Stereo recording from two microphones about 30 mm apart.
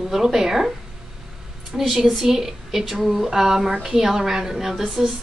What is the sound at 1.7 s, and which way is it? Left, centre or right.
Speech, centre.